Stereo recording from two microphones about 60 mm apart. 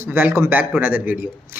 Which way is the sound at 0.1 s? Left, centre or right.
Right.